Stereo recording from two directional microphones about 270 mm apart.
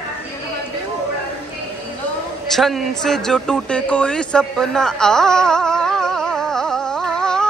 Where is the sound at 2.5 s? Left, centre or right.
Centre.